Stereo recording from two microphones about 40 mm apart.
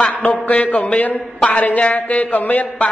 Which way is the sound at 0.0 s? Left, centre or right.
Left.